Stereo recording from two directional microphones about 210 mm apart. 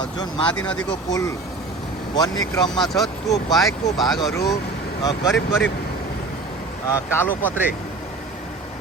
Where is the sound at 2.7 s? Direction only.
Centre (ahead or behind).